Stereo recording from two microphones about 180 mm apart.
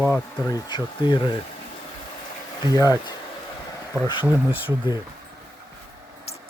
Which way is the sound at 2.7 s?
20° left (ahead or behind).